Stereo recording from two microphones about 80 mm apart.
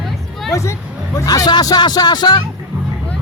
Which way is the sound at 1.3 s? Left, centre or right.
Left.